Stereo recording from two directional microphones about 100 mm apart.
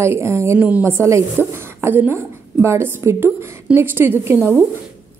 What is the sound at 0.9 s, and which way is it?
Speech, 30° right (ahead or behind).